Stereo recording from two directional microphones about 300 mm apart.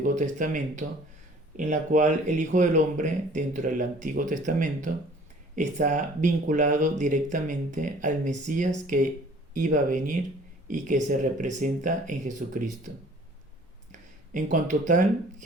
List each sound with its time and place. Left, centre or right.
0.0 s speech: right
14.3 s speech: right